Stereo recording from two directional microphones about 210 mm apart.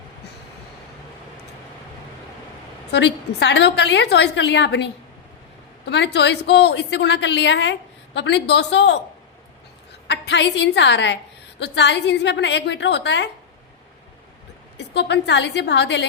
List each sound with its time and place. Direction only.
2.9 s a woman's voice: 55° left (ahead or behind)
10.1 s a woman's voice: 55° left (ahead or behind)
14.8 s a woman's voice: 55° left (ahead or behind)